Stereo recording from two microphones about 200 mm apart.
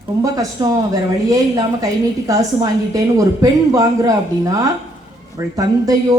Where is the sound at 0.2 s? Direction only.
20° right (ahead or behind).